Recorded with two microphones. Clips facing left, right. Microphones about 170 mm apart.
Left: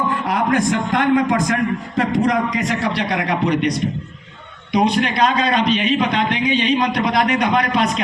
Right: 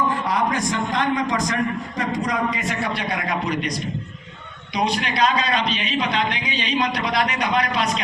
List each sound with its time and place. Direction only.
0.3 s a man's voice: 60° left (ahead or behind)